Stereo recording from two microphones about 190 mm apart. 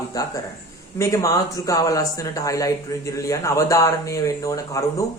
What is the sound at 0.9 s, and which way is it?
Speech, 15° left (ahead or behind).